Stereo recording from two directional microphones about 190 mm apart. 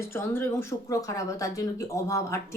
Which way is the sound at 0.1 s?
10° left (ahead or behind).